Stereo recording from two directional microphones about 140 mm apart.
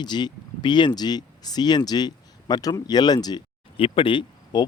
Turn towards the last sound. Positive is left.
turn(degrees=35)  # may be behind; listen again after turning